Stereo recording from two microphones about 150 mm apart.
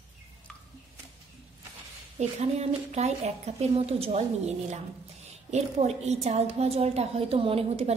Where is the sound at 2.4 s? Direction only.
45° right (ahead or behind).